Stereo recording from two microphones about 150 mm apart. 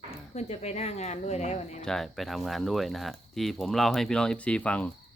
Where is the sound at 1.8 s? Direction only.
5° left (ahead or behind).